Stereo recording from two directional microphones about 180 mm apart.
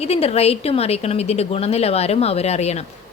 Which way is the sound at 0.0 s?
35° left (ahead or behind).